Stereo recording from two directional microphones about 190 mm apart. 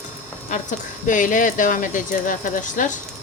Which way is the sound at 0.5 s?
40° left (ahead or behind).